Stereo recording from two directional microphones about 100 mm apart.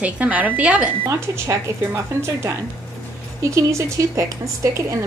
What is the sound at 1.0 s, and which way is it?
Speech, 25° right (ahead or behind).